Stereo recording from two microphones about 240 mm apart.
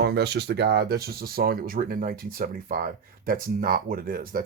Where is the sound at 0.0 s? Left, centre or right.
Right.